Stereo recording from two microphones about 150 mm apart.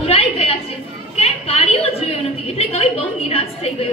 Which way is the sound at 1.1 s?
45° left (ahead or behind).